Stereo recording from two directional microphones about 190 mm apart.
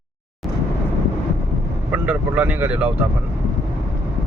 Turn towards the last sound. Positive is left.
turn(degrees=-10)  # may be behind; listen again after turning